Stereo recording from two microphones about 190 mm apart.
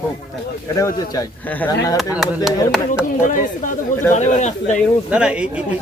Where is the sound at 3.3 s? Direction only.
45° left (ahead or behind).